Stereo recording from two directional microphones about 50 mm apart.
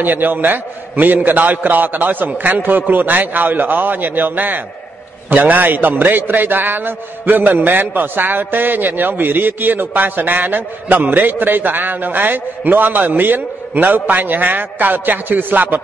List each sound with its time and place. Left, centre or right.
0.0 s a man's voice: right